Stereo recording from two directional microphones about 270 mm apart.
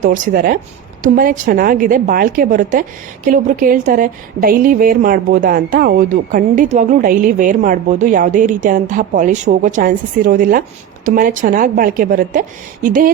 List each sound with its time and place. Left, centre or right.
0.0 s a woman's voice: right